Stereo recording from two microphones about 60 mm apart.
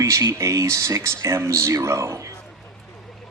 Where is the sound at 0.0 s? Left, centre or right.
Right.